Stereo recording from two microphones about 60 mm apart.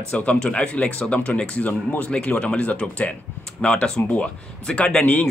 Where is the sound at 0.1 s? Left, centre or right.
Left.